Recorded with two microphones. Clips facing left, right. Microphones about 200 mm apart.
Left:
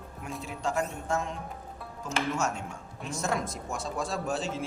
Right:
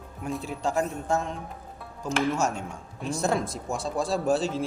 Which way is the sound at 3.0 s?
35° right (ahead or behind).